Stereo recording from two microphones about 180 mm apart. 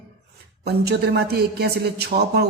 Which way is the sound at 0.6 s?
65° right (ahead or behind).